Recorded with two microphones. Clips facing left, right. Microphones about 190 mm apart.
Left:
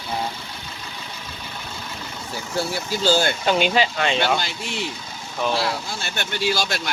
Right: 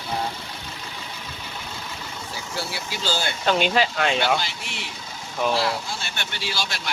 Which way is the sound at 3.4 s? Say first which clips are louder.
Left 1 dB; 5° left (ahead or behind).